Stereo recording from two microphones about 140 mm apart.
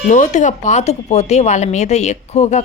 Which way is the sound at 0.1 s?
60° left (ahead or behind).